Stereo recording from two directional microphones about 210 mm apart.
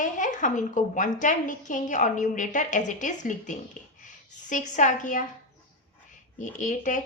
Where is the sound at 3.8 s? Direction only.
35° left (ahead or behind).